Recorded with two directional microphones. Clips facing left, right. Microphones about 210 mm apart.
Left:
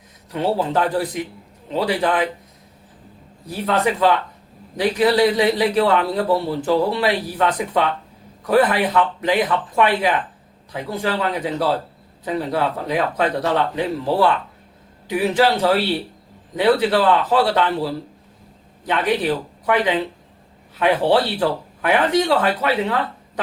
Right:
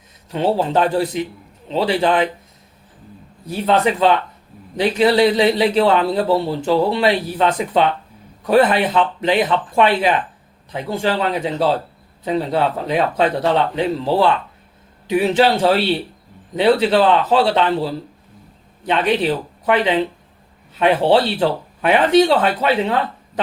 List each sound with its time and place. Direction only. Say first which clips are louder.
0.3 s a man's voice: right 2 dB; 30° right (ahead or behind)
3.4 s a man's voice: right 3 dB; 25° right (ahead or behind)